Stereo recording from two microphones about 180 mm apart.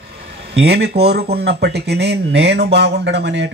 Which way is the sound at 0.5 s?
65° right (ahead or behind).